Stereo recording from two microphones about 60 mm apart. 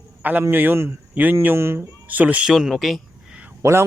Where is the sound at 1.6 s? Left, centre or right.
Right.